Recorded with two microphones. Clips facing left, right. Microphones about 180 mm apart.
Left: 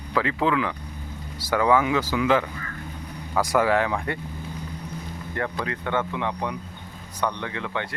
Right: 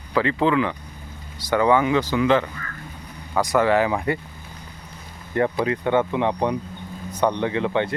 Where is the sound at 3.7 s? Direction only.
5° right (ahead or behind).